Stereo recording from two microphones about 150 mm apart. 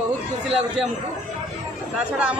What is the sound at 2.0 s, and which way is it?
Speech, 10° right (ahead or behind).